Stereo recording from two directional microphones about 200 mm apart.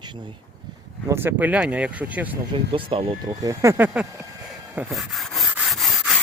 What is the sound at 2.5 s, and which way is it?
Speech, 25° right (ahead or behind).